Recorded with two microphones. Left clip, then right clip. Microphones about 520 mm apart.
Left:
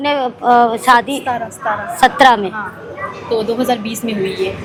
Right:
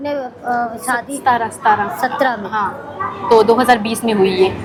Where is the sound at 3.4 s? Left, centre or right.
Right.